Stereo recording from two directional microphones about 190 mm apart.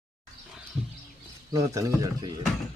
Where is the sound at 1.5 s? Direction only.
15° right (ahead or behind).